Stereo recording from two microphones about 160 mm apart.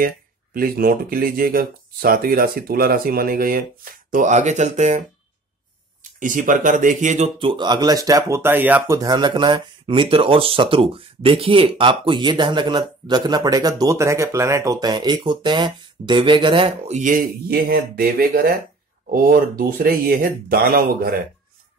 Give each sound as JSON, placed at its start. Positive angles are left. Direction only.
{"t": 0.6, "sound": "speech", "side_deg": -65}
{"t": 6.1, "sound": "speech", "side_deg": -55}
{"t": 7.3, "sound": "speech", "side_deg": -30}